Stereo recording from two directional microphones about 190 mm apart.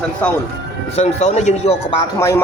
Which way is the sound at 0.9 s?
35° left (ahead or behind).